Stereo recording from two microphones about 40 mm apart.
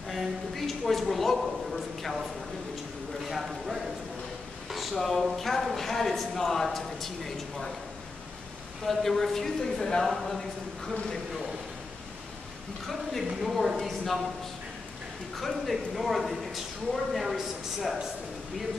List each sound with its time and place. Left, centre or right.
0.1 s a woman's voice: centre
3.3 s a woman's voice: centre
8.8 s a woman's voice: centre
12.8 s a woman's voice: centre
15.3 s a woman's voice: centre